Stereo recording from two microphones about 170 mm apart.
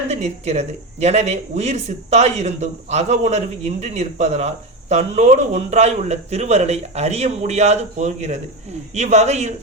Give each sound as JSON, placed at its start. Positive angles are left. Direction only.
{"t": 0.1, "sound": "a man's voice", "side_deg": -40}